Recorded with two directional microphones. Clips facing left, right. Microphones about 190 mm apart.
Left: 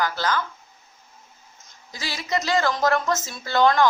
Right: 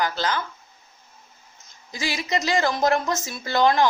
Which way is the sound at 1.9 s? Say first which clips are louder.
Right 1 dB; 15° right (ahead or behind).